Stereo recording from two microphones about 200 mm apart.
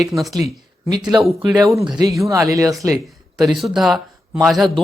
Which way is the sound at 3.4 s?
Centre (ahead or behind).